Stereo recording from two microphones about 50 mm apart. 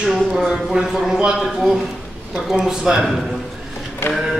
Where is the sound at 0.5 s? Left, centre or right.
Centre.